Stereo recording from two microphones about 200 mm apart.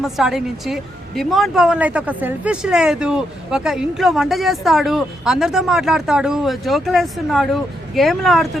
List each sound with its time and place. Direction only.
0.0 s speech: centre (ahead or behind)